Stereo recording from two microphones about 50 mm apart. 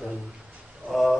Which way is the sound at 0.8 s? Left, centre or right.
Centre.